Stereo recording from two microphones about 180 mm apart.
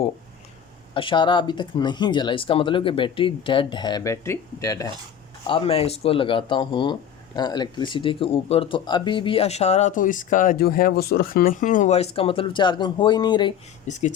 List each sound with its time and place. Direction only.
0.9 s speech: 25° left (ahead or behind)
5.5 s speech: 30° left (ahead or behind)
13.9 s speech: 40° left (ahead or behind)